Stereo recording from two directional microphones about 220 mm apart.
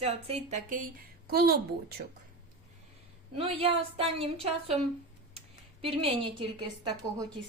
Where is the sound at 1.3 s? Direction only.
45° right (ahead or behind).